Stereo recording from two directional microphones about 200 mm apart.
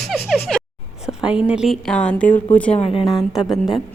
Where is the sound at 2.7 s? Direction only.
30° left (ahead or behind).